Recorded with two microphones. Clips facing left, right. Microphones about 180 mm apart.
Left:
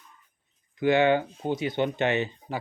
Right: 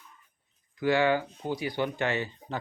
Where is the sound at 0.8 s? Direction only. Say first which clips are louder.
Left 3 dB; 20° left (ahead or behind).